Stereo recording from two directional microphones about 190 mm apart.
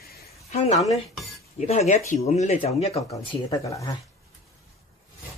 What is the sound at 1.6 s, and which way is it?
Speech, 35° left (ahead or behind).